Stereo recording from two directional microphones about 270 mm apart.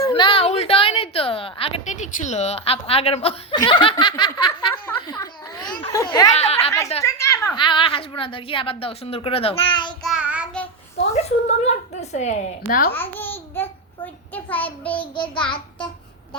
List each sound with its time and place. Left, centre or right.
0.0 s a sound: centre
6.9 s a child's voice: centre
10.0 s child singing: centre
11.0 s a woman's voice: left
12.9 s speech: centre
13.6 s child singing: centre
14.9 s speech: centre